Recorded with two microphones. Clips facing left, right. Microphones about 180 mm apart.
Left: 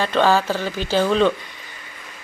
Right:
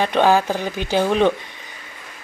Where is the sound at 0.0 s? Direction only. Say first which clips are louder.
Right 1 dB; 15° right (ahead or behind).